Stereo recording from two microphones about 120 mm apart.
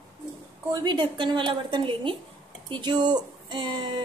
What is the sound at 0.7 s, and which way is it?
A woman's voice, 35° right (ahead or behind).